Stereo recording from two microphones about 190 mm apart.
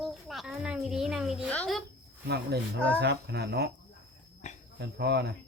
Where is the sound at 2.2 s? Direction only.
60° right (ahead or behind).